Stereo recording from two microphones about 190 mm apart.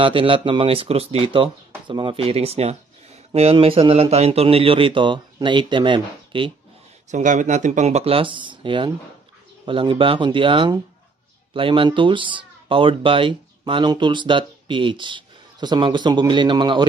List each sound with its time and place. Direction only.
0.0 s speech: 30° right (ahead or behind)
7.1 s speech: 40° right (ahead or behind); by 16.8 s 25° right (ahead or behind)